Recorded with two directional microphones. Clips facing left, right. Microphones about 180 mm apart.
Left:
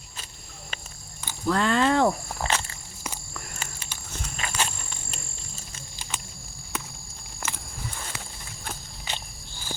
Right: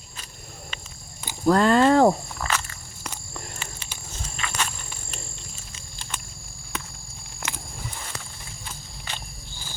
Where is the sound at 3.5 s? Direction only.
40° left (ahead or behind).